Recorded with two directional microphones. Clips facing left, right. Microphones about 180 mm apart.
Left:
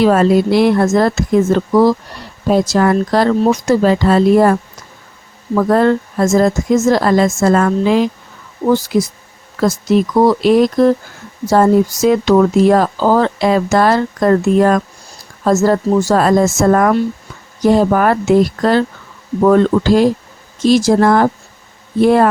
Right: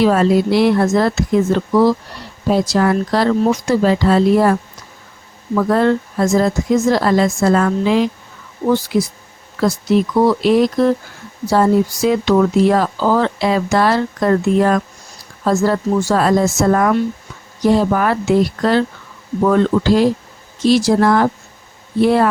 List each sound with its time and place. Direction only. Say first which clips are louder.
0.0 s speech: left 2 dB; 50° left (ahead or behind)
5.5 s speech: left 2 dB; 45° left (ahead or behind)
10.2 s speech: left 2 dB; 45° left (ahead or behind)